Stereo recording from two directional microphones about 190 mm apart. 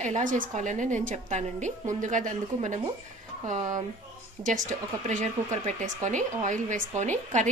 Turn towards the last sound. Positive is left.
turn(degrees=-40)  # may be behind; listen again after turning